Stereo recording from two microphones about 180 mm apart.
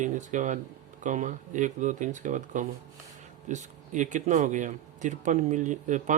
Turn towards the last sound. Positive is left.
turn(degrees=-45)  # may be behind; listen again after turning